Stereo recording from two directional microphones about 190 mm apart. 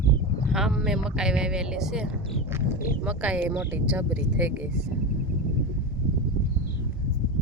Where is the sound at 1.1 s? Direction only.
5° right (ahead or behind).